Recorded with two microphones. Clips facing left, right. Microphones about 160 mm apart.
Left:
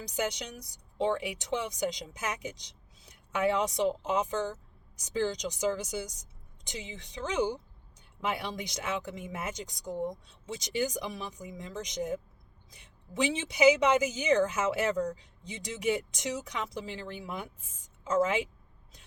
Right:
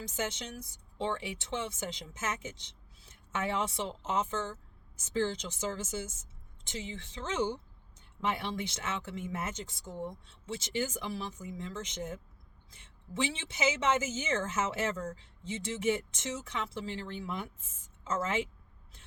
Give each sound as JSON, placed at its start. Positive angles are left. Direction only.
{"t": 0.0, "sound": "a woman's voice", "side_deg": 15}